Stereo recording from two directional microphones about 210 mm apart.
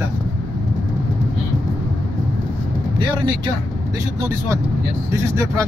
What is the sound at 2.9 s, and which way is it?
A man's voice, 20° right (ahead or behind).